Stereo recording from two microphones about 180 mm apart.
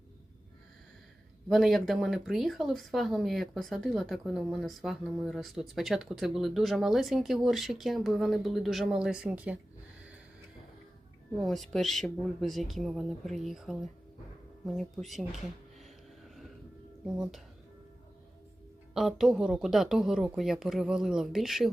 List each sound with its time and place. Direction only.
1.5 s speech: centre (ahead or behind)
11.7 s speech: centre (ahead or behind)
15.8 s a sound: centre (ahead or behind)
18.9 s speech: centre (ahead or behind)